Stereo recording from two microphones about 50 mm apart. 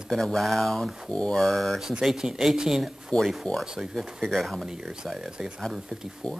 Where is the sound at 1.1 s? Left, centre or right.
Left.